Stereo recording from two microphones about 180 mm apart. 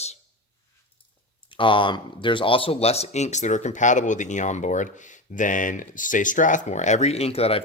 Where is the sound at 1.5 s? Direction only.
30° left (ahead or behind).